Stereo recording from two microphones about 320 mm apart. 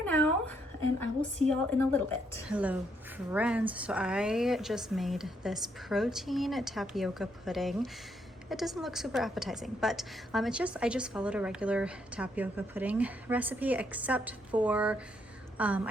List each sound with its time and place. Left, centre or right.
0.0 s a sound: centre
1.5 s speech: centre
2.5 s a woman's voice: centre